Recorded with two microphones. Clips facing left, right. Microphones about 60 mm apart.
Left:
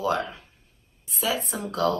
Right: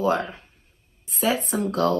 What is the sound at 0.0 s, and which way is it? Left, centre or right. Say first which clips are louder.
Speech: right 3 dB; right.